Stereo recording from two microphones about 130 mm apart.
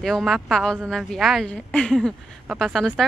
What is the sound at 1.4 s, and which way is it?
A woman's voice, 10° left (ahead or behind).